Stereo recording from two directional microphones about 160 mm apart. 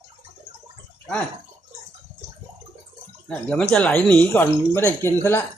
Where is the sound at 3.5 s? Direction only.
5° left (ahead or behind).